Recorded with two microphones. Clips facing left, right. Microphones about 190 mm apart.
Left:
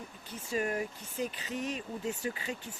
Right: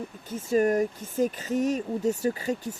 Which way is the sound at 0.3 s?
45° right (ahead or behind).